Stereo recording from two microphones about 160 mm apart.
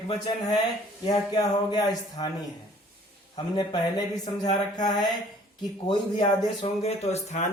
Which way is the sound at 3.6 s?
25° left (ahead or behind).